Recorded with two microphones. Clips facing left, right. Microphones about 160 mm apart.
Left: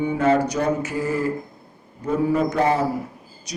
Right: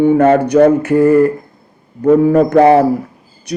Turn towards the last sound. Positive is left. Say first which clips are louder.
# right 12 dB
turn(degrees=-60)  # may be behind; listen again after turning